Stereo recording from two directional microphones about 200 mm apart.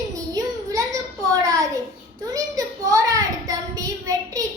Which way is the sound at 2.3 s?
15° right (ahead or behind).